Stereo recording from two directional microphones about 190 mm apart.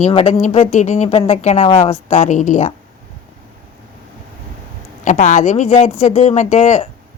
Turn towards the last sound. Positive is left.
turn(degrees=35)  # may be behind; listen again after turning